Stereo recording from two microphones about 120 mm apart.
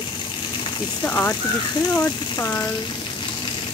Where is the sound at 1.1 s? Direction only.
15° left (ahead or behind).